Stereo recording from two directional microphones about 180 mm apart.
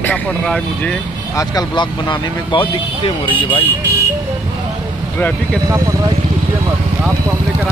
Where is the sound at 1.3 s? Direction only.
25° left (ahead or behind).